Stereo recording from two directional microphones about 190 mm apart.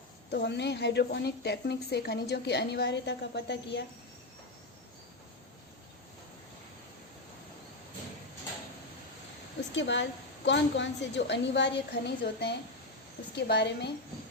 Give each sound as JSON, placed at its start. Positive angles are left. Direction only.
{"t": 0.3, "sound": "a woman's voice", "side_deg": 60}
{"t": 9.7, "sound": "a woman's voice", "side_deg": 70}